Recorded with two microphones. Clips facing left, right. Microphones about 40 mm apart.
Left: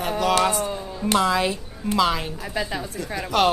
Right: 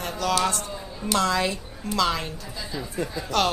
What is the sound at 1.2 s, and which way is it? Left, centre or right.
A woman's voice, centre.